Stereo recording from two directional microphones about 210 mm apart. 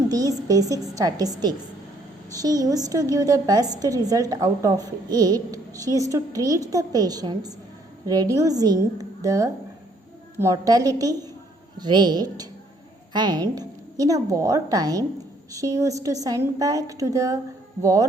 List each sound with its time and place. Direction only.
0.1 s a woman's voice: 15° right (ahead or behind)